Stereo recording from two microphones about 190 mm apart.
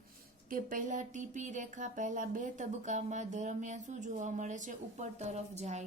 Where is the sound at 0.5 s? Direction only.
45° right (ahead or behind).